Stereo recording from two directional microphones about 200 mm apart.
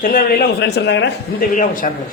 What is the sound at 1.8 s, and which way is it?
Speech, 40° left (ahead or behind).